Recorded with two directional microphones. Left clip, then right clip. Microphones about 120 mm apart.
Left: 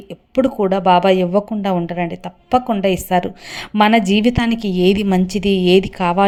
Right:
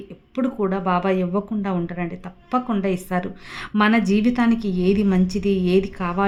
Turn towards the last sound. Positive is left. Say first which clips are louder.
# left 7 dB
turn(degrees=50)  # may be behind; listen again after turning